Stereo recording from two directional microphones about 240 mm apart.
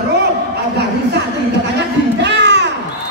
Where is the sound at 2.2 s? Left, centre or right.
Right.